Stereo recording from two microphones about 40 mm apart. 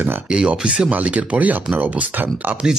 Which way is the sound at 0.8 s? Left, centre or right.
Right.